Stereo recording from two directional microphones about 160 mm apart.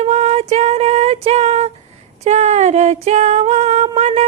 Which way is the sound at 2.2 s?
45° right (ahead or behind).